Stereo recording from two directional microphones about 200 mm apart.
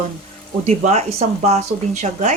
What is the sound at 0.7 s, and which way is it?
Speech, 35° right (ahead or behind).